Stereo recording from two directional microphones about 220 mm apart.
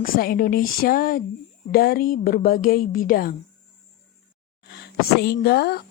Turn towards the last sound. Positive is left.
turn(degrees=45)  # may be behind; listen again after turning